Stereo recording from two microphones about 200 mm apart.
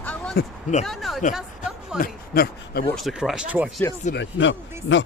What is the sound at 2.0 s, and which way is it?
Speech, 50° left (ahead or behind).